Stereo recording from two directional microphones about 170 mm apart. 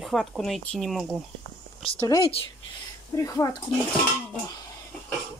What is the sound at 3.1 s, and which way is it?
Speech, 20° left (ahead or behind).